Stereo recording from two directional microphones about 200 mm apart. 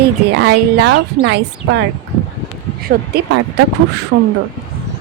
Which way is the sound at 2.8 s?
50° right (ahead or behind).